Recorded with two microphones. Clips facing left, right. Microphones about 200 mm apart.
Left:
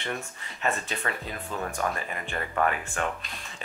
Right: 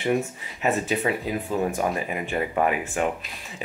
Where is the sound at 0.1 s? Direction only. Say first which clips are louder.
Right 13 dB; 5° right (ahead or behind).